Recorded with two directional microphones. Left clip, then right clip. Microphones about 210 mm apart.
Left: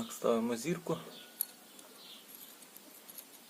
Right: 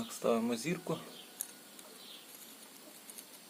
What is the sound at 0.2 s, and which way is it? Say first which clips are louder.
Speech: left 1 dB; 10° left (ahead or behind).